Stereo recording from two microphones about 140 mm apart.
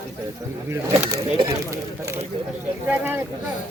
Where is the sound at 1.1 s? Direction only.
25° right (ahead or behind).